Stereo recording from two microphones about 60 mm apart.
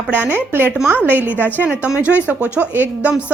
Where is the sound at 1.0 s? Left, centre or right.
Right.